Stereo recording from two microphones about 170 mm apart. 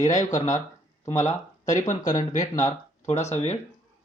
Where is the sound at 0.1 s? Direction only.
45° left (ahead or behind).